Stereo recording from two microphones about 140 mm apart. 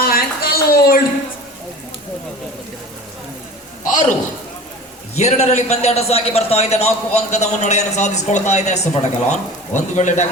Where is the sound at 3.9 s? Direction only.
60° left (ahead or behind).